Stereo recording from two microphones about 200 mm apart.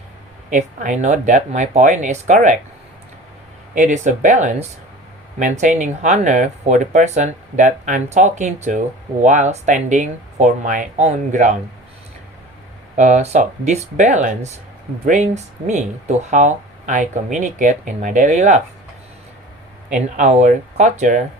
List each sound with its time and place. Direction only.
0.5 s speech: 40° right (ahead or behind)
3.8 s speech: 35° right (ahead or behind)
13.0 s speech: 35° right (ahead or behind)
20.1 s speech: 35° right (ahead or behind)